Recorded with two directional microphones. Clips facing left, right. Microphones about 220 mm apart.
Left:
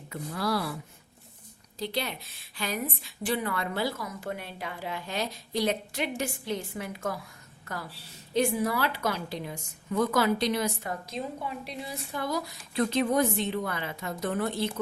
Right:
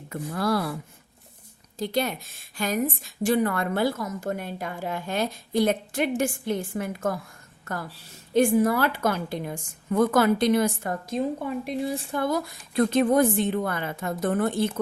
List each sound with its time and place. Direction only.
0.1 s a woman's voice: 50° right (ahead or behind)
1.8 s a woman's voice: 45° right (ahead or behind)